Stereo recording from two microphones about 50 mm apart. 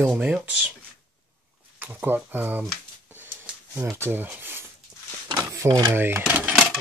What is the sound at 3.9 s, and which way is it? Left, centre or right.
Speech, right.